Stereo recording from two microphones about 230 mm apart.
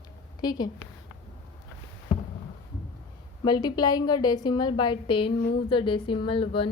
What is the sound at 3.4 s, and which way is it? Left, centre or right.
A woman's voice, centre.